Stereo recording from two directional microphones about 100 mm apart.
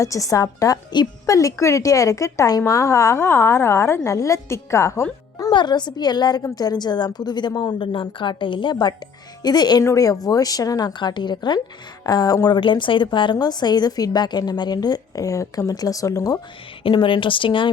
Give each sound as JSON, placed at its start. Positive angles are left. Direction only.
{"t": 0.0, "sound": "a woman's voice", "side_deg": 35}
{"t": 5.5, "sound": "a woman's voice", "side_deg": 50}
{"t": 7.8, "sound": "a woman's voice", "side_deg": 55}
{"t": 12.5, "sound": "a woman's voice", "side_deg": 55}
{"t": 16.8, "sound": "a woman's voice", "side_deg": 55}